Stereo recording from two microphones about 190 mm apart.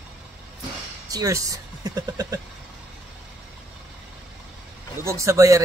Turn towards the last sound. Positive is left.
turn(degrees=-15)  # may be behind; listen again after turning